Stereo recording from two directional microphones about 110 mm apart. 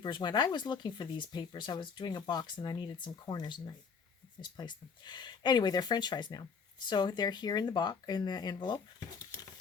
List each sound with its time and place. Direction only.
0.0 s speech: 40° left (ahead or behind)